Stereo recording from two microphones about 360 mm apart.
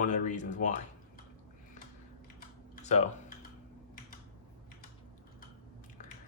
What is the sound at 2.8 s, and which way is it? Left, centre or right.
Typing, centre.